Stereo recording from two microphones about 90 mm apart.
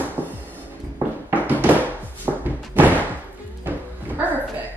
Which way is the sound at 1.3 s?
20° right (ahead or behind).